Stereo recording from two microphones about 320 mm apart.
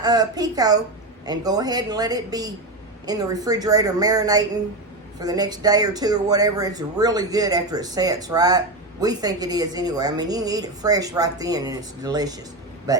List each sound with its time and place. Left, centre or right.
0.0 s speech: centre